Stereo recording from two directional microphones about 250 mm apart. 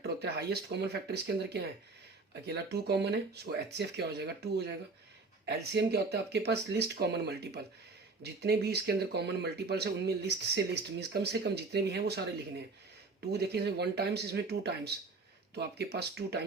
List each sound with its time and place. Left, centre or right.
0.0 s speech: right